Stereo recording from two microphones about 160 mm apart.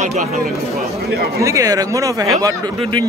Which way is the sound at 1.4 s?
20° right (ahead or behind).